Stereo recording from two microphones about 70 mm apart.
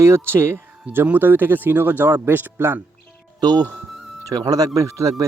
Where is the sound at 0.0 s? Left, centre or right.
Right.